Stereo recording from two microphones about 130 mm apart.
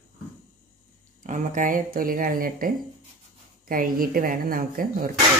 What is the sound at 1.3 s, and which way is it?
Speech, 85° right.